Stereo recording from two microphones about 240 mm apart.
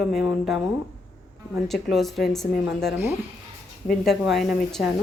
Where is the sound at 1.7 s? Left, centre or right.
Centre.